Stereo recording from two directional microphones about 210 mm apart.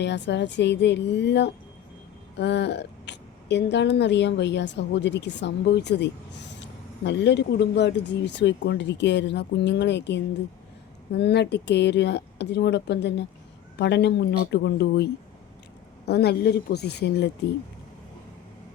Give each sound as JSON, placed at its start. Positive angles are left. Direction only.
{"t": 0.0, "sound": "a woman's voice", "side_deg": 55}